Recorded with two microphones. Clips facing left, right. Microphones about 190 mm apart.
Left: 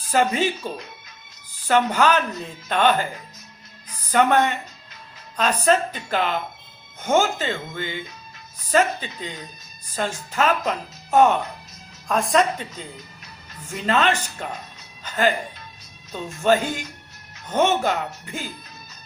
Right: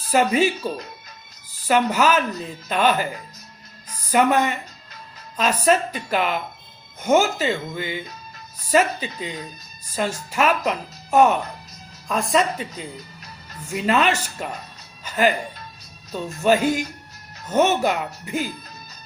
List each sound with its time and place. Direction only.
0.1 s speech: 10° right (ahead or behind)
1.6 s speech: 10° right (ahead or behind)
4.1 s a woman's voice: 5° right (ahead or behind)
12.7 s music: 40° right (ahead or behind)
13.7 s speech: 10° right (ahead or behind)
15.0 s music: 10° right (ahead or behind)
16.4 s speech: 10° right (ahead or behind)